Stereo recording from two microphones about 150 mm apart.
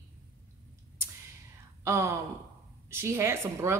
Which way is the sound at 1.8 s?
20° right (ahead or behind).